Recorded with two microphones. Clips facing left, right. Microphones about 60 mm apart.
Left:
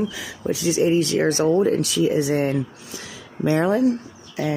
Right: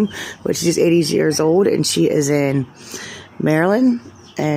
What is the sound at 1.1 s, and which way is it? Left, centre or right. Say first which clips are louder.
Speech: right 4 dB; right.